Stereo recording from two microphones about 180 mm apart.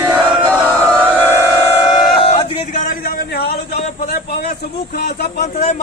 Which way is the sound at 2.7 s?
50° left (ahead or behind).